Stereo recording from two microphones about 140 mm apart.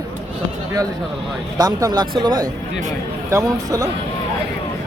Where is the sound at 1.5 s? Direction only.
30° right (ahead or behind).